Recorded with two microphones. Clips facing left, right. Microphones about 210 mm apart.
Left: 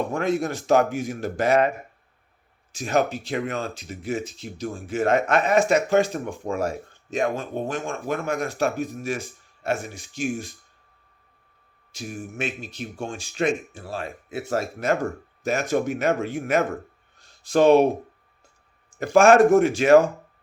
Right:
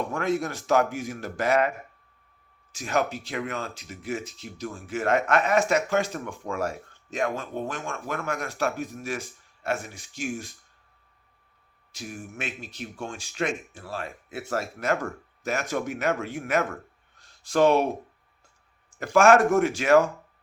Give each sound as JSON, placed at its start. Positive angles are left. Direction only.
{"t": 0.1, "sound": "speech", "side_deg": 25}
{"t": 2.7, "sound": "speech", "side_deg": 25}
{"t": 11.9, "sound": "speech", "side_deg": 20}
{"t": 18.9, "sound": "speech", "side_deg": 25}